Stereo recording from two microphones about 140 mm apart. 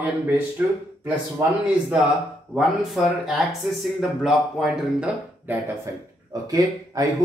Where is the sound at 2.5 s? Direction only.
Centre (ahead or behind).